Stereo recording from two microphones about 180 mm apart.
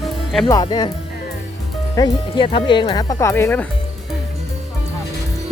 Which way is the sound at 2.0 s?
25° left (ahead or behind).